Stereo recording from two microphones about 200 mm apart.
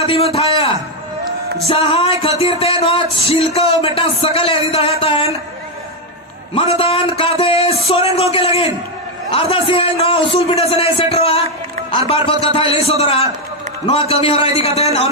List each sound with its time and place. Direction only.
0.0 s a man's voice: 30° left (ahead or behind)
6.5 s speech: 25° left (ahead or behind)